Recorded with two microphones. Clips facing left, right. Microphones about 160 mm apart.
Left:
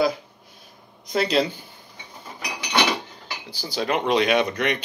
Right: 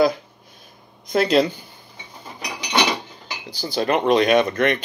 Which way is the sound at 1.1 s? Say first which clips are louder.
Right 4 dB; 55° right (ahead or behind).